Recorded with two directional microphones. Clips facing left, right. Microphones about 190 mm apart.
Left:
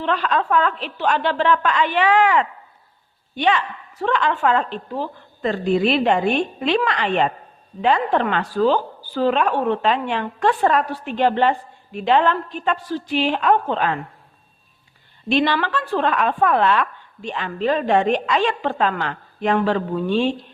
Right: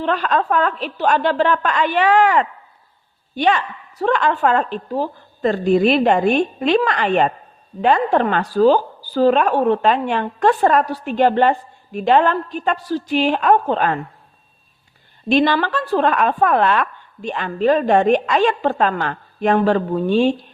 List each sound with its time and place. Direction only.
0.0 s a woman's voice: 45° right (ahead or behind)
15.3 s a woman's voice: 45° right (ahead or behind)